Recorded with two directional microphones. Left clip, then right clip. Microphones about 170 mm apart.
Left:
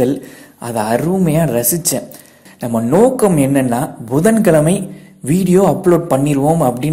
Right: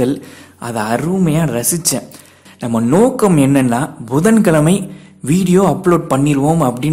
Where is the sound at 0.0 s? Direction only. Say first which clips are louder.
Left 1 dB; 10° right (ahead or behind).